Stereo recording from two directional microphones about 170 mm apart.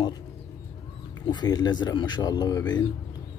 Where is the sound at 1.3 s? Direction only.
25° left (ahead or behind).